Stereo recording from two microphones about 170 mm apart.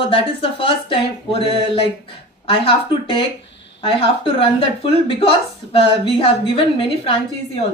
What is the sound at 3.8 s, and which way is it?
Speech, 35° left (ahead or behind).